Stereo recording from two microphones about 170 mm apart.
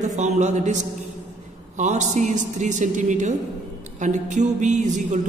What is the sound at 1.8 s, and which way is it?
A woman's voice, 45° right (ahead or behind).